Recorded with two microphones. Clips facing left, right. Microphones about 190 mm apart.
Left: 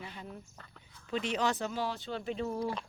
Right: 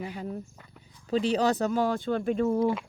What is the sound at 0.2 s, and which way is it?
Speech, 40° right (ahead or behind).